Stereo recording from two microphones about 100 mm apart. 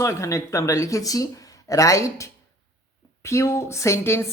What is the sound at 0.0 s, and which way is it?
A woman's voice, 30° left (ahead or behind).